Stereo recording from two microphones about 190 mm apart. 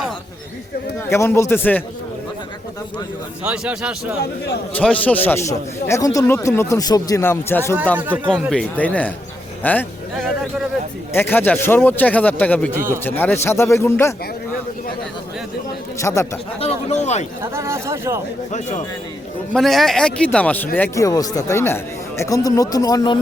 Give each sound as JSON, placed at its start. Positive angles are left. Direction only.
{"t": 1.1, "sound": "speech", "side_deg": 15}
{"t": 3.4, "sound": "a man's voice", "side_deg": -5}
{"t": 4.7, "sound": "speech", "side_deg": 5}
{"t": 7.9, "sound": "speech", "side_deg": -10}
{"t": 8.3, "sound": "speech", "side_deg": 5}
{"t": 11.1, "sound": "speech", "side_deg": 10}
{"t": 16.0, "sound": "speech", "side_deg": 15}
{"t": 16.6, "sound": "speech", "side_deg": 35}
{"t": 17.4, "sound": "speech", "side_deg": -15}
{"t": 19.5, "sound": "a man's voice", "side_deg": 0}